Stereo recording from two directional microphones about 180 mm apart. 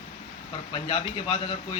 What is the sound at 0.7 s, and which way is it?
Speech, 30° left (ahead or behind).